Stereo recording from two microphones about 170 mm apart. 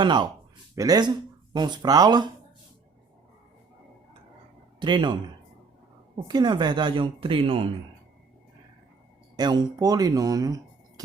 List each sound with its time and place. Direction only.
0.0 s speech: 25° right (ahead or behind)
4.8 s speech: 25° right (ahead or behind)
6.1 s speech: 25° right (ahead or behind)
9.3 s speech: 25° right (ahead or behind)